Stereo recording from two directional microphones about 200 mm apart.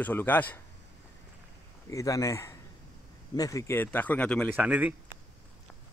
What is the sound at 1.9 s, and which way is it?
Speech, 15° left (ahead or behind).